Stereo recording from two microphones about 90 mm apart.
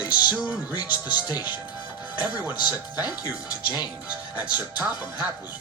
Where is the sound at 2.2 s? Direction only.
20° right (ahead or behind).